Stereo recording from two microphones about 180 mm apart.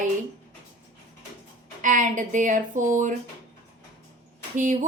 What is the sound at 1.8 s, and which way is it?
A woman's voice, 45° right (ahead or behind).